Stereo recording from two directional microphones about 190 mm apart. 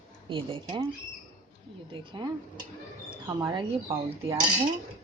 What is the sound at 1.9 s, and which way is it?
Speech, 25° right (ahead or behind).